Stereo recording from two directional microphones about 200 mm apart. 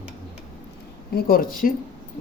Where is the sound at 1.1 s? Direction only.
45° left (ahead or behind).